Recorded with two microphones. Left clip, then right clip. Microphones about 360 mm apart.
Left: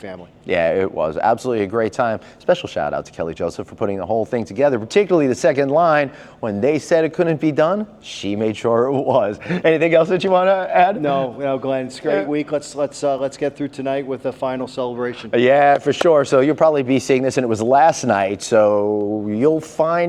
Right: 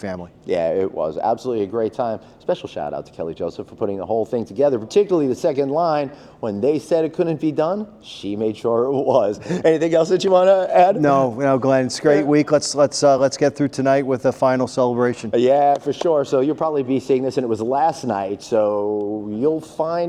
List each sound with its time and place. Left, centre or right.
0.4 s speech: centre
2.7 s speech: left; by 10.9 s centre
11.0 s a man's voice: right
15.3 s speech: centre
18.1 s speech: centre
18.7 s speech: left